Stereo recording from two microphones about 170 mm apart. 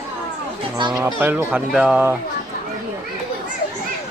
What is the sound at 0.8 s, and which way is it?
Speech, 25° right (ahead or behind).